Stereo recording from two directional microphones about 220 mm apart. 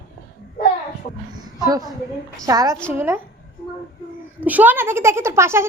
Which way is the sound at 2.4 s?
15° right (ahead or behind).